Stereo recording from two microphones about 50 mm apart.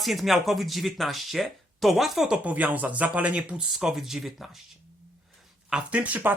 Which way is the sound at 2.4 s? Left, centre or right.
Right.